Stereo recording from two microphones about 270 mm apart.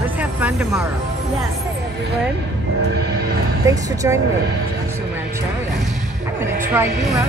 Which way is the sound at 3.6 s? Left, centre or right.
Centre.